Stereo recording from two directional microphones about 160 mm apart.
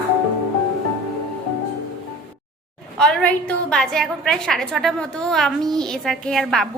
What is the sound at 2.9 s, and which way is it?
A woman's voice, 5° left (ahead or behind).